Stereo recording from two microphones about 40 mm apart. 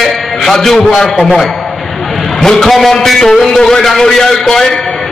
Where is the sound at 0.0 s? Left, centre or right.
Centre.